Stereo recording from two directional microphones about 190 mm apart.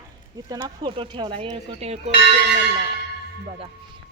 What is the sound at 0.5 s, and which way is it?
Speech, 25° right (ahead or behind).